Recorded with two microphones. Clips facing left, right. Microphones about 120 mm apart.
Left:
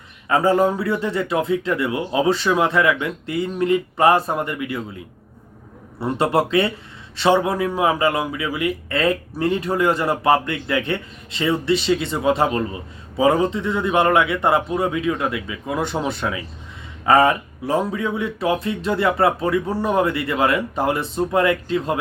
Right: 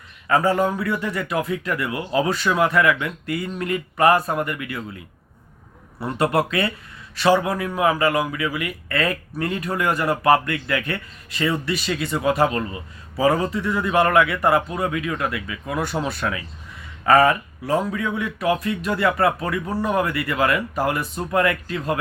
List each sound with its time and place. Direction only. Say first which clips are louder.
0.3 s a man's voice: left 2 dB; 25° left (ahead or behind)
6.0 s a man's voice: left 2 dB; 25° left (ahead or behind)